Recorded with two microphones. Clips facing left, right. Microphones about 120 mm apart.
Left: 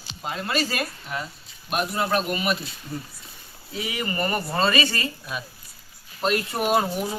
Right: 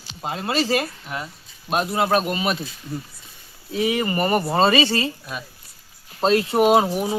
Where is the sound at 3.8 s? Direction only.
25° right (ahead or behind).